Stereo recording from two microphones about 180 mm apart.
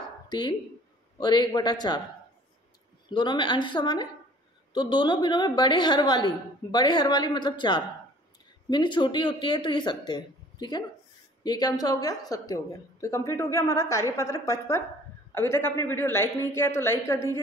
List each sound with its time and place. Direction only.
0.3 s a woman's voice: 25° left (ahead or behind)
3.1 s a woman's voice: 25° left (ahead or behind)